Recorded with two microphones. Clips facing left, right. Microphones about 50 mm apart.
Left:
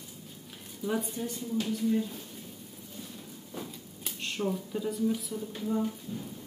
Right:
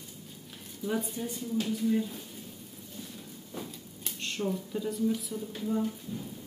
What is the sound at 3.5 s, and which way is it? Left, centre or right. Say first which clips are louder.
Speech: even; centre.